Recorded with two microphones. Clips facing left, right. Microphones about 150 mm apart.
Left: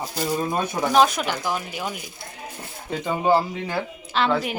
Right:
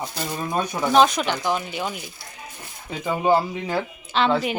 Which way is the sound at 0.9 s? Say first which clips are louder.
Right 2 dB; 5° left (ahead or behind).